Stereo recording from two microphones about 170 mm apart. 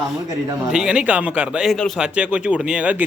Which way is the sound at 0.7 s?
5° right (ahead or behind).